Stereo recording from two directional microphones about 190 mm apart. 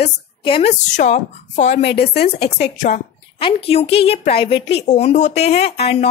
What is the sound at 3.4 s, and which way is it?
A woman's voice, 30° left (ahead or behind).